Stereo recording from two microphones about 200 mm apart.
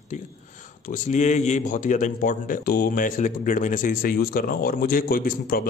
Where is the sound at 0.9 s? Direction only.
35° left (ahead or behind).